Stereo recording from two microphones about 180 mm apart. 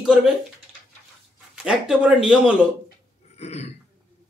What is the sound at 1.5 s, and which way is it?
Speech, 5° right (ahead or behind).